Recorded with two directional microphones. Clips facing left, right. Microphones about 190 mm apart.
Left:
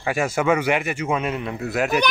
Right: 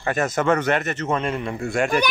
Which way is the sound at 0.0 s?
10° left (ahead or behind).